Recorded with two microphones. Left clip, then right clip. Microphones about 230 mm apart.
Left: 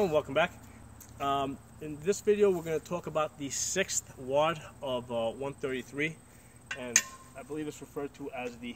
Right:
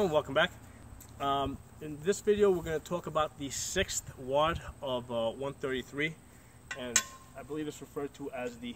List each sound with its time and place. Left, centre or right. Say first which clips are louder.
0.0 s speech: left 1 dB; centre